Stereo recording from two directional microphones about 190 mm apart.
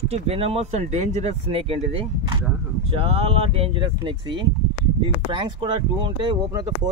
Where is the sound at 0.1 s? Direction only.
30° right (ahead or behind).